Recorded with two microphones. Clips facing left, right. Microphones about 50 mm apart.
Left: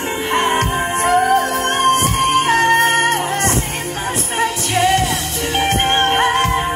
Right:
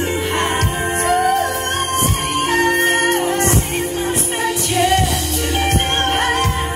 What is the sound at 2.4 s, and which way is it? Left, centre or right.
Music, left.